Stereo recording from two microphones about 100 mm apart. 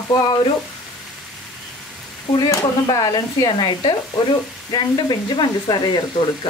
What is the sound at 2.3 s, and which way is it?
Speech, 40° left (ahead or behind).